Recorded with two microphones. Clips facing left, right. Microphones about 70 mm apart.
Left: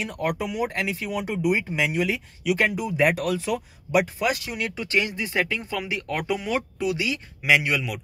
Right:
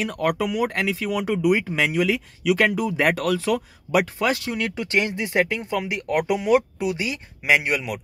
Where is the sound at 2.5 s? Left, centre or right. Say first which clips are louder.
Right 2 dB; right.